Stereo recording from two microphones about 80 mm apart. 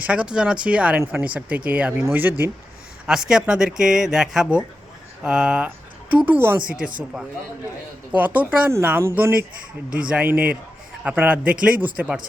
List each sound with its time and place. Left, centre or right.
0.0 s speech: centre
3.1 s speech: centre; by 6.6 s right
6.7 s speech: centre
8.2 s speech: centre
8.8 s speech: right